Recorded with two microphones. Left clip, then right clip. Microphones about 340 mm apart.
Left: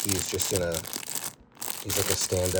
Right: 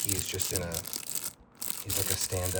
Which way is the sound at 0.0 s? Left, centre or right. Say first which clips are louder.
Left 5 dB; centre.